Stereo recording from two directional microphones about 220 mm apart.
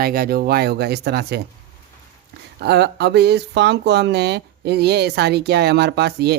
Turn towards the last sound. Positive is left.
turn(degrees=-50)  # may be behind; listen again after turning